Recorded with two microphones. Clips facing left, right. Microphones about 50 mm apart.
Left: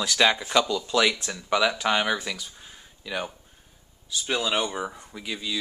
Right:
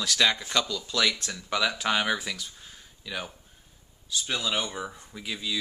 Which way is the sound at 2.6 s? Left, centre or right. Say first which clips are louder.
Left 2 dB; centre.